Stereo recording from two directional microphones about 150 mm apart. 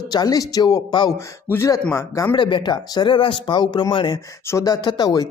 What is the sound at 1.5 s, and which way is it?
Speech, 15° left (ahead or behind).